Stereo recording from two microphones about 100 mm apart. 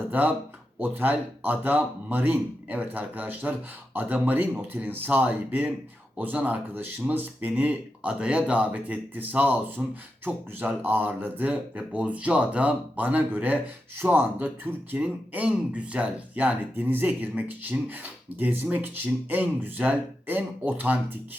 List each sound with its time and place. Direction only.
0.1 s speech: 20° right (ahead or behind)